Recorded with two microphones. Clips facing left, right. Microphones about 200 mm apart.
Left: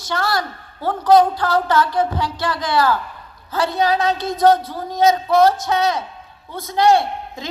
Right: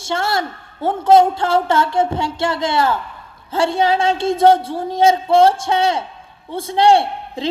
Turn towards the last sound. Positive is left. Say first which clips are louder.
# right 3 dB
turn(degrees=-30)  # may be behind; listen again after turning